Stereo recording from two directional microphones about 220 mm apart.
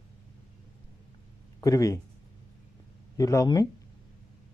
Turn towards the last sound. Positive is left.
turn(degrees=15)  # may be behind; listen again after turning